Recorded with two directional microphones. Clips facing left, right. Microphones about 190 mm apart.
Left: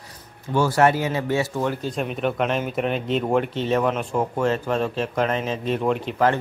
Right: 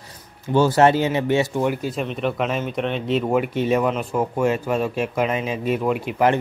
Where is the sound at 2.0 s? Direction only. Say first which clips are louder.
Left 1 dB; centre (ahead or behind).